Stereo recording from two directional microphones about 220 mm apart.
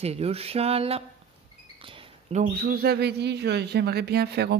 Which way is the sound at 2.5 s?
45° right (ahead or behind).